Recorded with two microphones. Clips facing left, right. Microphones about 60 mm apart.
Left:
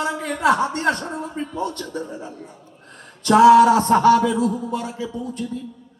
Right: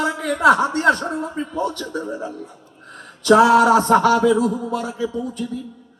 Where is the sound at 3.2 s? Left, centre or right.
Right.